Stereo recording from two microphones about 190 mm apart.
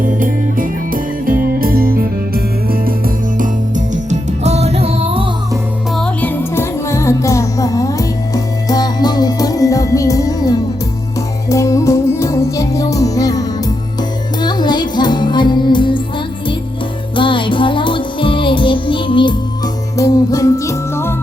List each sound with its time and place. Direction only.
0.0 s music: 45° right (ahead or behind); by 5.3 s 30° right (ahead or behind)
5.9 s music: 5° left (ahead or behind)
14.4 s music: 20° left (ahead or behind)
17.2 s music: 25° left (ahead or behind)